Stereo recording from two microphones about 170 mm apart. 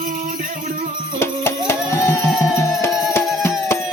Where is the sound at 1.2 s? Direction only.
15° left (ahead or behind).